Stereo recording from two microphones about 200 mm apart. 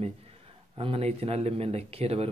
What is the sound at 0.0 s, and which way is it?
A man's voice, 30° right (ahead or behind).